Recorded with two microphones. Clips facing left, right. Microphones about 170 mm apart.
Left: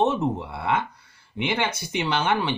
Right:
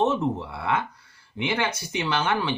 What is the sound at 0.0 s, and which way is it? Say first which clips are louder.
Speech: left 1 dB; 20° left (ahead or behind).